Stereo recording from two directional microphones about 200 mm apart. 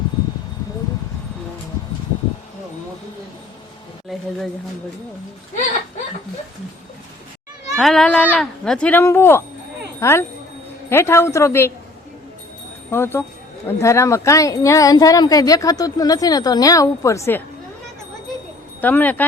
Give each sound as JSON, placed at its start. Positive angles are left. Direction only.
{"t": 7.8, "sound": "a woman's voice", "side_deg": 0}
{"t": 12.9, "sound": "a woman's voice", "side_deg": 10}
{"t": 18.8, "sound": "a woman's voice", "side_deg": 10}